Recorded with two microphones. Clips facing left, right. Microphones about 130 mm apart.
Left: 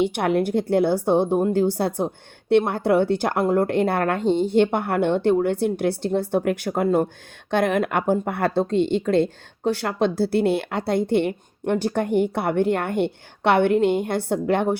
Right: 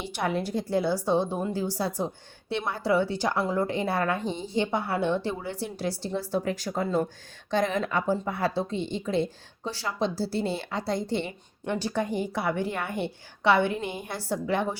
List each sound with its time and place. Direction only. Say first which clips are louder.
0.0 s a woman's voice: left 9 dB; 65° left (ahead or behind)